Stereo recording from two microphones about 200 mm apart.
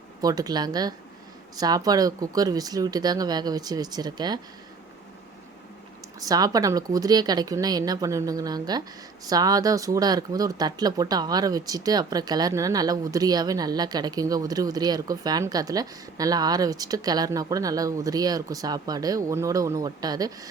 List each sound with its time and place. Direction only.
0.2 s speech: 20° right (ahead or behind)
6.1 s speech: 20° right (ahead or behind)